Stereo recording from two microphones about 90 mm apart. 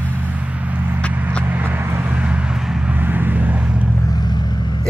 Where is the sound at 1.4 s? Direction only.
20° right (ahead or behind).